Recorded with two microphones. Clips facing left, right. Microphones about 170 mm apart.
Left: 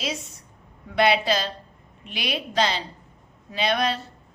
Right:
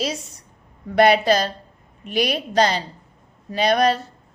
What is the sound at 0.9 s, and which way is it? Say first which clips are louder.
A woman's voice: right 5 dB; 45° right (ahead or behind).